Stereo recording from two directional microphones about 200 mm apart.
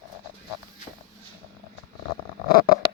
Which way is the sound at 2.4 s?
50° left (ahead or behind).